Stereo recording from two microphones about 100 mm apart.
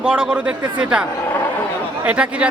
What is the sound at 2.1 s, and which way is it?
Speech, 10° right (ahead or behind).